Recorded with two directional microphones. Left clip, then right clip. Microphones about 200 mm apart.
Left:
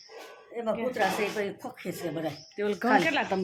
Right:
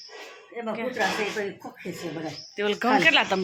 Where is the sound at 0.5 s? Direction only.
55° left (ahead or behind).